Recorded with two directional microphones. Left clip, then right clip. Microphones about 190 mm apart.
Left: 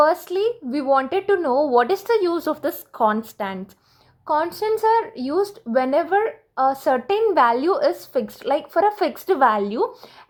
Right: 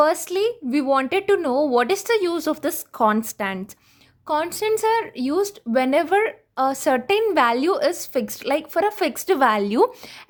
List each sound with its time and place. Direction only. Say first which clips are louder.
0.0 s a woman's voice: left 1 dB; 25° right (ahead or behind)